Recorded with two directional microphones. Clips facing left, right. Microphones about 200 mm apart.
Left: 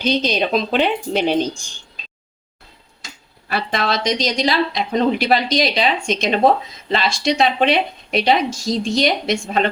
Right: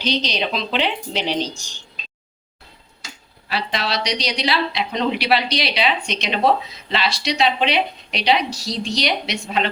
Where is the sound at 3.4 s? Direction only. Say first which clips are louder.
Left 4 dB; 50° left (ahead or behind).